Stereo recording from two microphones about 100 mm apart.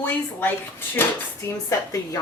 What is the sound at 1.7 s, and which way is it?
Speech, 35° left (ahead or behind).